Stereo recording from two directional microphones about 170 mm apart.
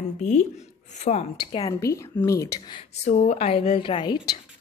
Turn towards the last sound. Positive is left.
turn(degrees=25)  # may be behind; listen again after turning